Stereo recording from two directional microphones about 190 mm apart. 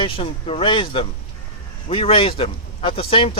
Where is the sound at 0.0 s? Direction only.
30° left (ahead or behind).